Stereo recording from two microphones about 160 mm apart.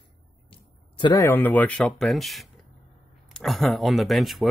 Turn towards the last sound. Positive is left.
turn(degrees=0)  # may be behind; listen again after turning